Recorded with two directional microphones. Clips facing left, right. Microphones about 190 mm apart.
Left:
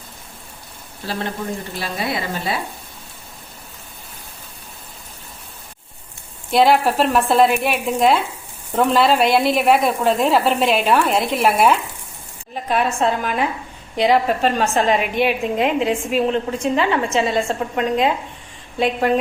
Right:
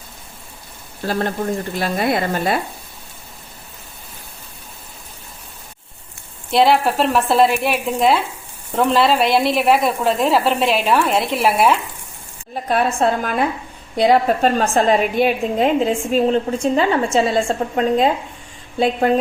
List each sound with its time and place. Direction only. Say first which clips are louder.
1.8 s a woman's voice: right 6 dB; 50° right (ahead or behind)
6.5 s speech: even; centre (ahead or behind)
12.6 s a woman's voice: right 2 dB; 35° right (ahead or behind)